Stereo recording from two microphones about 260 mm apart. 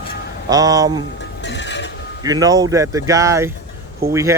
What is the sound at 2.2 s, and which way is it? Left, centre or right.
Speech, centre.